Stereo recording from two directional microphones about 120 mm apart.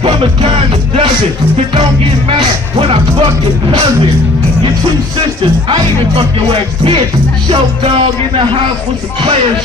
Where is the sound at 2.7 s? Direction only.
50° right (ahead or behind).